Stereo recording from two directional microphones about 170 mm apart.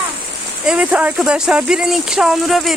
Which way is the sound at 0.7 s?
5° right (ahead or behind).